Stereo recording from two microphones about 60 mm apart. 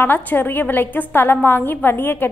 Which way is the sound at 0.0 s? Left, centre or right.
Left.